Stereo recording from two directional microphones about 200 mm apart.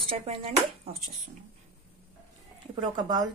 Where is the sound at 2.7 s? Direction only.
20° right (ahead or behind).